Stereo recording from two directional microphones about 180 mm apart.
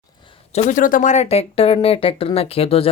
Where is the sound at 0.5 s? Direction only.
45° left (ahead or behind).